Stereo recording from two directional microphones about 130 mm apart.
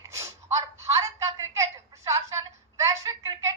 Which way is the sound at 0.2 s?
25° right (ahead or behind).